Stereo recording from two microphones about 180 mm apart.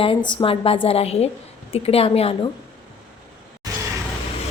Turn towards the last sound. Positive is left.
turn(degrees=-20)  # may be behind; listen again after turning